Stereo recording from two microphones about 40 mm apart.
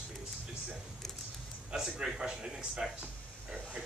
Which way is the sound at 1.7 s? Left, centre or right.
Centre.